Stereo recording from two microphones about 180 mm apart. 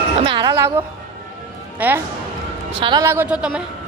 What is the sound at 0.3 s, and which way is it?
Music, 25° right (ahead or behind).